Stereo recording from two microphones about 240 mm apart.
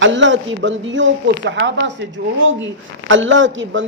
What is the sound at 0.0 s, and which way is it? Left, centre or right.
Speech, right.